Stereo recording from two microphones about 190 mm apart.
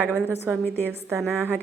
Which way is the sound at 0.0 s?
10° right (ahead or behind).